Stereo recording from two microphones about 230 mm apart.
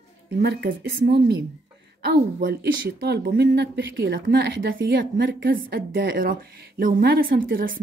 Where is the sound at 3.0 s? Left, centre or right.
Right.